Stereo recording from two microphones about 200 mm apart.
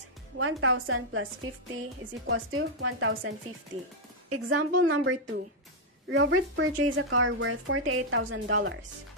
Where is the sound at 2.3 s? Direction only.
90° right.